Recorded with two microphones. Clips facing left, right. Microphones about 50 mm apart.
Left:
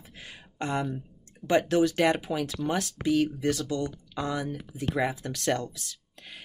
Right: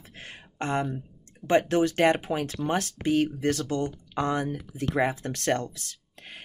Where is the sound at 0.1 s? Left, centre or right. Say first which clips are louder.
Right 3 dB; right.